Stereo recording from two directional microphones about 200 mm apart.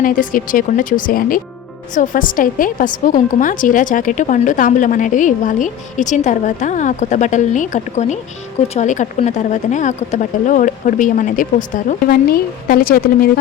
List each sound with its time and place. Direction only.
0.0 s a woman's voice: 40° left (ahead or behind)